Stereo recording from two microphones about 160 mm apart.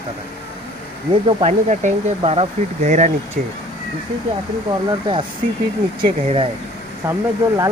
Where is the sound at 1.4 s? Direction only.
45° right (ahead or behind).